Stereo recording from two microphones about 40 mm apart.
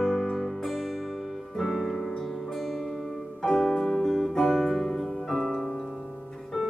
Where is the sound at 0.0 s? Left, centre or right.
Centre.